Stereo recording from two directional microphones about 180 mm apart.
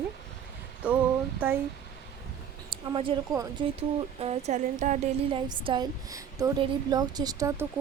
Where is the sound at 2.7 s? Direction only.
30° right (ahead or behind).